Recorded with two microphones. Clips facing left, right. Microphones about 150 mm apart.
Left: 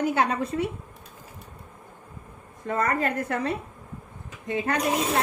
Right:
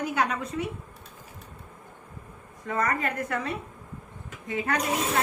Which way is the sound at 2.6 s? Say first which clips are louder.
Left 3 dB; 30° left (ahead or behind).